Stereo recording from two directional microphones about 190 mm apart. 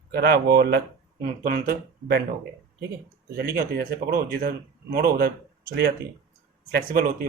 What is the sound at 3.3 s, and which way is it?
Speech, 50° right (ahead or behind).